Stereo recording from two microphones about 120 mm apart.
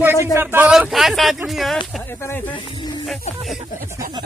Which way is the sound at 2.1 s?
20° left (ahead or behind).